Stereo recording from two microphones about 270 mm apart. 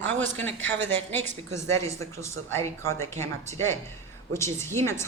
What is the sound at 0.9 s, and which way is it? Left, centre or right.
Speech, centre.